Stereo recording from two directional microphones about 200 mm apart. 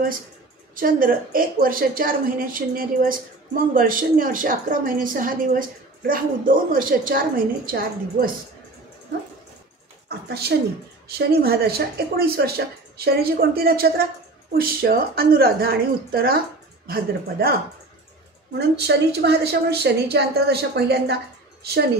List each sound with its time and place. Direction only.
0.7 s a woman's voice: 45° right (ahead or behind)
10.0 s a woman's voice: 50° right (ahead or behind)
18.8 s a woman's voice: 55° right (ahead or behind)